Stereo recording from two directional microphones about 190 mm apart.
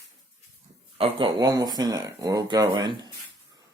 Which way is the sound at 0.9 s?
30° right (ahead or behind).